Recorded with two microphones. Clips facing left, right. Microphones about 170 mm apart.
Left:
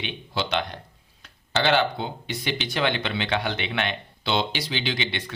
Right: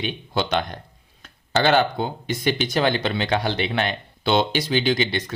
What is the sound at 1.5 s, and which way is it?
Speech, 45° right (ahead or behind).